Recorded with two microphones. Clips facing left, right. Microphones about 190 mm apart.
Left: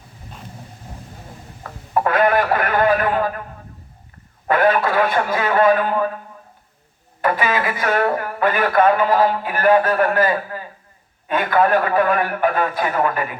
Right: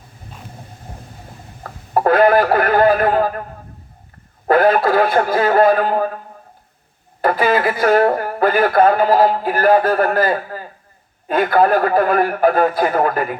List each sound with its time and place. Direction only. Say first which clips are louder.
1.9 s a sound: right 4 dB; 35° right (ahead or behind)
4.4 s speech: right 4 dB; 35° right (ahead or behind)
7.2 s speech: right 4 dB; 35° right (ahead or behind)